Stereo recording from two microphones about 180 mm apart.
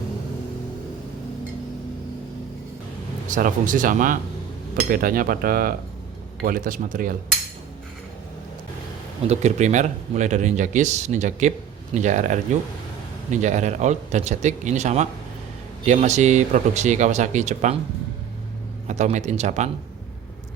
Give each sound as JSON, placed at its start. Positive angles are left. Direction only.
{"t": 3.2, "sound": "speech", "side_deg": -45}
{"t": 9.2, "sound": "speech", "side_deg": -40}
{"t": 18.9, "sound": "speech", "side_deg": -40}